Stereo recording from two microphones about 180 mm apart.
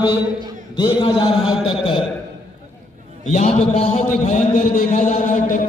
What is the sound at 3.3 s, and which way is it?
A man's voice, 40° left (ahead or behind).